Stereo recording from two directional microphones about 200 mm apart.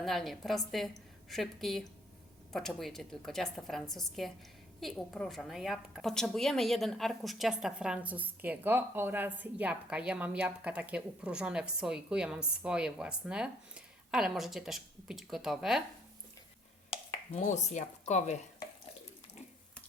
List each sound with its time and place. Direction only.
0.0 s a woman's voice: centre (ahead or behind)
16.9 s speech: 30° left (ahead or behind)